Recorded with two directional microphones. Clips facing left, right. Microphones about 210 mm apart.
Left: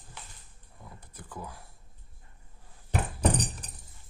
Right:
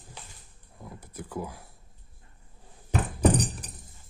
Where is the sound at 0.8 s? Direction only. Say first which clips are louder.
Right 7 dB; 10° right (ahead or behind).